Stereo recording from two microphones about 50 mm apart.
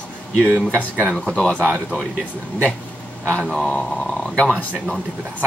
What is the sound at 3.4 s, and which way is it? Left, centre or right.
Speech, centre.